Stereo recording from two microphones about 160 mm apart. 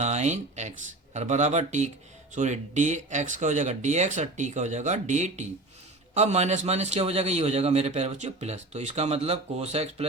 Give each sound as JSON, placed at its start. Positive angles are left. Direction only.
{"t": 0.0, "sound": "a man's voice", "side_deg": -45}